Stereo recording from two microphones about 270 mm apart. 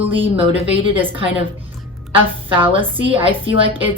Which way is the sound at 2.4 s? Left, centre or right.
Centre.